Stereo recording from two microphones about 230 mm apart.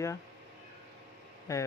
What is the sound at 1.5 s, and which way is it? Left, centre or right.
Speech, centre.